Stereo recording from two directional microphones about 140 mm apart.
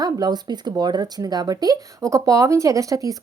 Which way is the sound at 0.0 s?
30° right (ahead or behind).